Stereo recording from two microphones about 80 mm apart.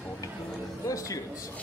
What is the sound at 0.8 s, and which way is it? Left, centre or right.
Speech, left.